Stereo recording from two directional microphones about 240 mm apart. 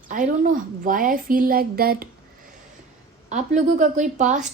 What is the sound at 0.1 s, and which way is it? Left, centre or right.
A woman's voice, right.